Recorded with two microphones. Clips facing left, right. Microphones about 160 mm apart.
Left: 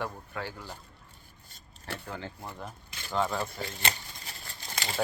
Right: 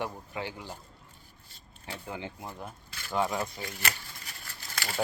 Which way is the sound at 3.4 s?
25° left (ahead or behind).